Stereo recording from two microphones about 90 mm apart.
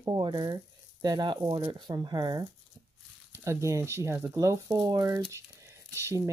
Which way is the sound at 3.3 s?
35° right (ahead or behind).